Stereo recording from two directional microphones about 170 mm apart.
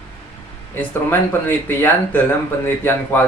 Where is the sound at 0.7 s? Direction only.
10° left (ahead or behind).